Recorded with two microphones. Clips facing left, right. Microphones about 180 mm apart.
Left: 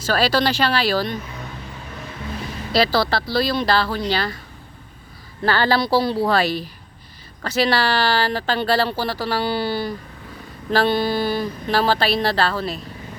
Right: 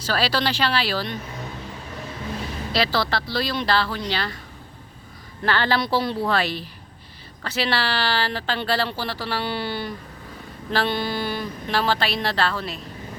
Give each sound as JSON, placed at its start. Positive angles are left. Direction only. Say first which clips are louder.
{"t": 0.0, "sound": "speech", "louder": "left 4 dB", "side_deg": 45}
{"t": 2.7, "sound": "speech", "louder": "left 5 dB", "side_deg": 40}
{"t": 5.4, "sound": "speech", "louder": "left 3 dB", "side_deg": 40}